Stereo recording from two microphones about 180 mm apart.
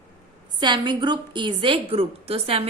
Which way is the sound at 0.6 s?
25° right (ahead or behind).